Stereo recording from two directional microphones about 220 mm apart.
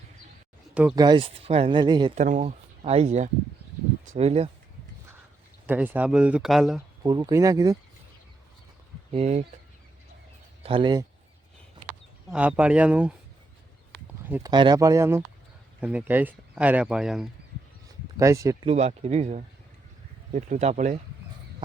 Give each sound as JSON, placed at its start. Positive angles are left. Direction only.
{"t": 0.7, "sound": "speech", "side_deg": -5}
{"t": 0.9, "sound": "speech", "side_deg": -20}
{"t": 2.1, "sound": "speech", "side_deg": -35}
{"t": 5.6, "sound": "speech", "side_deg": -10}
{"t": 7.0, "sound": "speech", "side_deg": -15}
{"t": 9.1, "sound": "speech", "side_deg": -30}
{"t": 10.6, "sound": "speech", "side_deg": -25}
{"t": 12.3, "sound": "speech", "side_deg": -5}
{"t": 14.3, "sound": "speech", "side_deg": -15}
{"t": 18.2, "sound": "speech", "side_deg": -15}
{"t": 18.7, "sound": "speech", "side_deg": -30}